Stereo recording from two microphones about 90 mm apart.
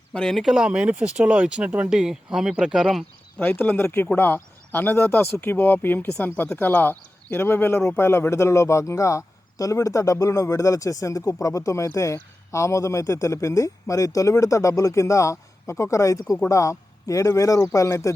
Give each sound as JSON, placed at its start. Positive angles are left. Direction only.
{"t": 0.1, "sound": "speech", "side_deg": 5}
{"t": 3.3, "sound": "a man's voice", "side_deg": 20}